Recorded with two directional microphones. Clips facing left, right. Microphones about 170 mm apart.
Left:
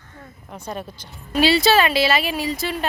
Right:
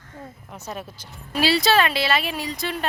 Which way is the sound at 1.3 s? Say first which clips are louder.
Left 3 dB; centre (ahead or behind).